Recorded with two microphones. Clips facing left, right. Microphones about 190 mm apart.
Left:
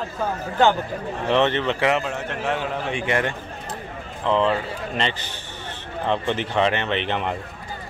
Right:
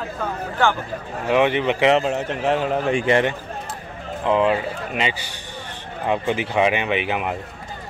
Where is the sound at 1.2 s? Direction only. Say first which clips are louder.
Right 2 dB; 10° right (ahead or behind).